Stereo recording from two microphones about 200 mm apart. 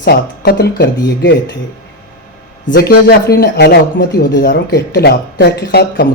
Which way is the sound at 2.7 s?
50° left (ahead or behind).